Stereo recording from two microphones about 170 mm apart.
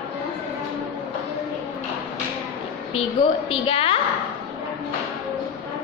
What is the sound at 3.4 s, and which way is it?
Speech, 30° left (ahead or behind).